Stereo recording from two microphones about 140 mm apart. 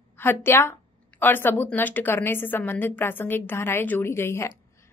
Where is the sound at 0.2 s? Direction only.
15° left (ahead or behind).